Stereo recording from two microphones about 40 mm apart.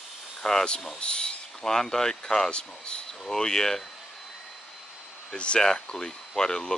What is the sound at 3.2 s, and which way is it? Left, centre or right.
Speech, centre.